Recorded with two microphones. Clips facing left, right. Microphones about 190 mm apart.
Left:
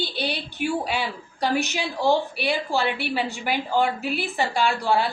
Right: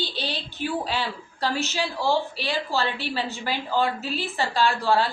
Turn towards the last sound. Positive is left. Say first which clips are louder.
# even
turn(degrees=15)  # may be behind; listen again after turning